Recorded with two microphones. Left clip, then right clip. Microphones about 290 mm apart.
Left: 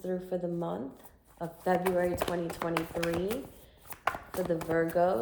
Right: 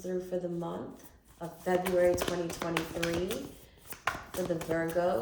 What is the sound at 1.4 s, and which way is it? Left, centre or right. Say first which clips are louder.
Speech: left 3 dB; centre.